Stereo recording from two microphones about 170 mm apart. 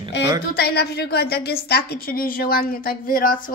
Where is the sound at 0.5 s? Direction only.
65° left (ahead or behind).